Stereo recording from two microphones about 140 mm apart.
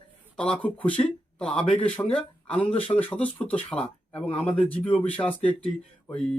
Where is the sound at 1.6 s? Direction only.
40° left (ahead or behind).